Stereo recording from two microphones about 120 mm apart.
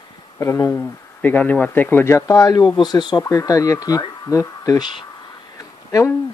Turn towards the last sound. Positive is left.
turn(degrees=30)  # may be behind; listen again after turning